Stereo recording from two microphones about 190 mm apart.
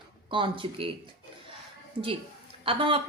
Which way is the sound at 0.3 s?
25° right (ahead or behind).